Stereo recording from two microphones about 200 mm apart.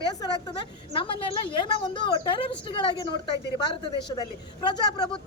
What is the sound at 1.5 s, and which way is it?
A woman's voice, 25° left (ahead or behind).